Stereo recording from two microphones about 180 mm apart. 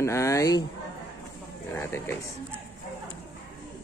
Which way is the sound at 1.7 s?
15° left (ahead or behind).